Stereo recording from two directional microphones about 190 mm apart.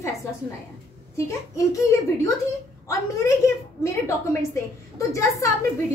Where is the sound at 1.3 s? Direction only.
15° left (ahead or behind).